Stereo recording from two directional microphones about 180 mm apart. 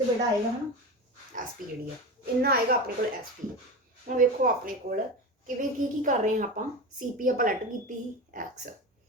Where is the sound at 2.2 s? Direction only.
60° right (ahead or behind).